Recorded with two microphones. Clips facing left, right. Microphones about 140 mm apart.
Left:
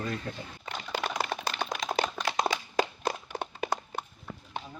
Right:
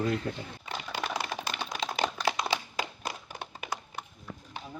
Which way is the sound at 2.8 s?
40° left (ahead or behind).